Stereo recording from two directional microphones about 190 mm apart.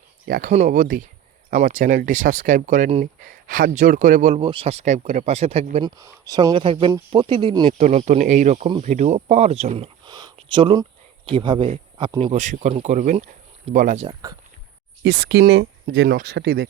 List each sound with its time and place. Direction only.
0.3 s speech: 50° right (ahead or behind)
0.5 s speech: 40° right (ahead or behind)
6.0 s speech: 20° right (ahead or behind); by 14.1 s 40° right (ahead or behind)
14.1 s speech: 20° right (ahead or behind)
15.0 s speech: 60° right (ahead or behind)